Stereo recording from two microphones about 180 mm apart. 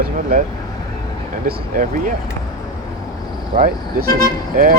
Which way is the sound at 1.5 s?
50° right (ahead or behind).